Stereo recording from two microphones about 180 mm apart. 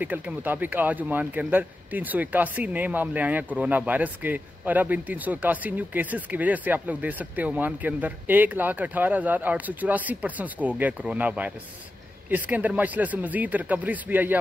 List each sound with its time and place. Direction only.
0.0 s speech: 10° right (ahead or behind)